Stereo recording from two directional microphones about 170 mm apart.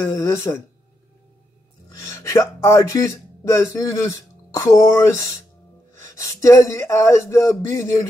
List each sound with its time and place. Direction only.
0.1 s speech: 15° left (ahead or behind)
1.9 s speech: 15° left (ahead or behind)